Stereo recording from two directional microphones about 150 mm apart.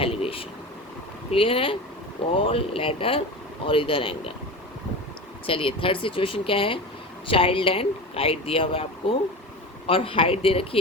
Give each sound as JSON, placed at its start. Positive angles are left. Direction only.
{"t": 0.0, "sound": "a sound", "side_deg": 40}
{"t": 1.3, "sound": "speech", "side_deg": 40}
{"t": 5.5, "sound": "speech", "side_deg": 35}